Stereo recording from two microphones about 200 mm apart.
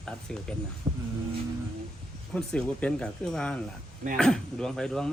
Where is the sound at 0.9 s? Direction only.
25° right (ahead or behind).